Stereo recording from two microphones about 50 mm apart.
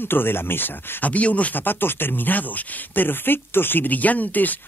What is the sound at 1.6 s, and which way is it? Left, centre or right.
Speech, left.